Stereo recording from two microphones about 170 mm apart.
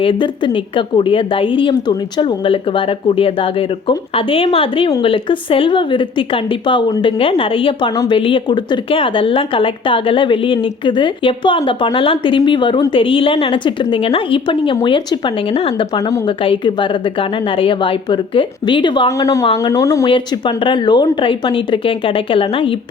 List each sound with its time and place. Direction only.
0.0 s speech: 30° left (ahead or behind)
16.0 s a woman's voice: 20° left (ahead or behind)